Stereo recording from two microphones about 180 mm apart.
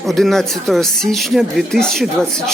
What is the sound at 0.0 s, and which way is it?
Speech, centre (ahead or behind).